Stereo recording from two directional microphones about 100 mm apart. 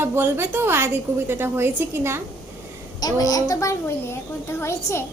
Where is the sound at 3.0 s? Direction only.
35° left (ahead or behind).